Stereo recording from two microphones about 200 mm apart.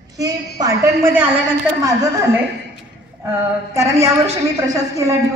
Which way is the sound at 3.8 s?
15° right (ahead or behind).